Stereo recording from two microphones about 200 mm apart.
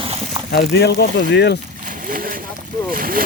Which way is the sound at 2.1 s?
45° right (ahead or behind).